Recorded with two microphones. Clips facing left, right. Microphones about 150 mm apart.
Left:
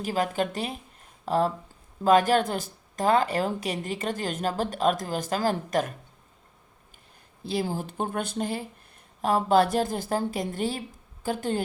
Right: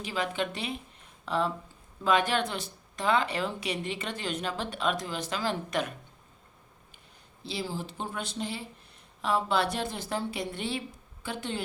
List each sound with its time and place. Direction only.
0.0 s a woman's voice: 45° left (ahead or behind)
7.4 s a woman's voice: 50° left (ahead or behind)